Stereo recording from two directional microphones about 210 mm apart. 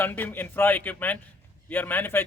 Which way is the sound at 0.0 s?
10° left (ahead or behind).